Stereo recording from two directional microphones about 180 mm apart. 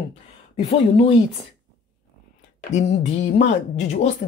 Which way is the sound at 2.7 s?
40° left (ahead or behind).